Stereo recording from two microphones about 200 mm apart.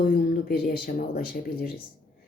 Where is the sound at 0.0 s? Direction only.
45° left (ahead or behind).